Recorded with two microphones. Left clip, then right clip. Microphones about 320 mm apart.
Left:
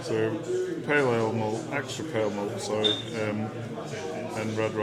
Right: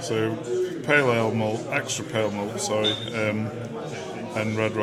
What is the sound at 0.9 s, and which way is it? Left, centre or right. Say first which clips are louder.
Speech: right 4 dB; right.